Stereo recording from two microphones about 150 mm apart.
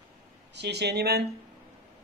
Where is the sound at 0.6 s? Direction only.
90° right.